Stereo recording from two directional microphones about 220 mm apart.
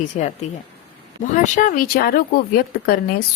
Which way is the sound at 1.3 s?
35° left (ahead or behind).